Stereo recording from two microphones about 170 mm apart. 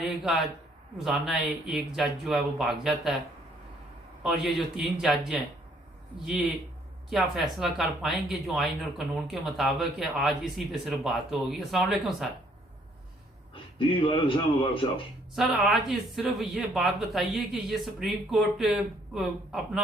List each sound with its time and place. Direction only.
0.0 s a man's voice: centre (ahead or behind)
4.2 s speech: 5° right (ahead or behind)
7.1 s speech: centre (ahead or behind)
13.5 s a man's voice: 30° left (ahead or behind)
15.4 s speech: centre (ahead or behind)